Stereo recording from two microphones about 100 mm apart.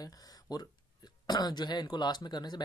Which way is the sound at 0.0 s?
40° left (ahead or behind).